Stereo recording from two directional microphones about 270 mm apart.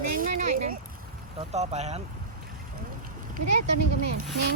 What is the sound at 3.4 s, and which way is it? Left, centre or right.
Speech, right.